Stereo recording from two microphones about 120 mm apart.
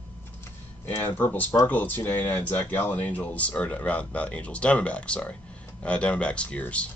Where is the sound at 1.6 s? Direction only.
15° left (ahead or behind).